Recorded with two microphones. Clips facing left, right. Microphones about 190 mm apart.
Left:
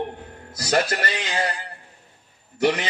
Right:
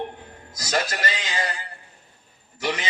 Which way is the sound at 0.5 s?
60° left (ahead or behind).